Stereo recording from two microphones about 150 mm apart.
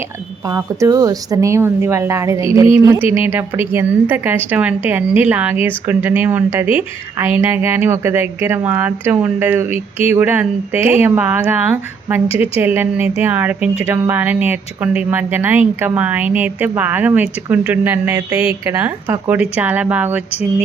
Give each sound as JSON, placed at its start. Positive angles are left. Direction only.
{"t": 0.4, "sound": "a woman's voice", "side_deg": -20}
{"t": 9.6, "sound": "speech", "side_deg": 45}
{"t": 10.1, "sound": "a woman's voice", "side_deg": -15}